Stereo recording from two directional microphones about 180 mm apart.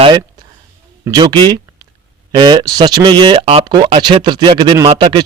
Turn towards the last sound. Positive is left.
turn(degrees=-25)  # may be behind; listen again after turning